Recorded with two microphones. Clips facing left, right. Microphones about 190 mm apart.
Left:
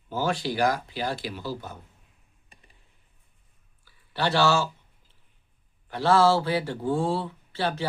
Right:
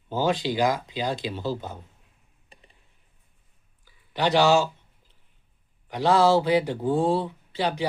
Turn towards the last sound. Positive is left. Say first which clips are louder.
# right 2 dB
turn(degrees=-15)  # may be behind; listen again after turning